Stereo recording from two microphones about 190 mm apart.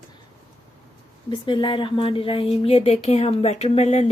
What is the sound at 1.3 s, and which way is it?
Speech, 25° left (ahead or behind).